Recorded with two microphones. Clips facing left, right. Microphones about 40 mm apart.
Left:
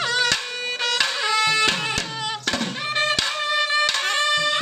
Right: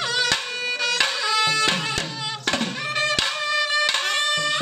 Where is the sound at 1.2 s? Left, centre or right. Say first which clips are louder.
Left 1 dB; left.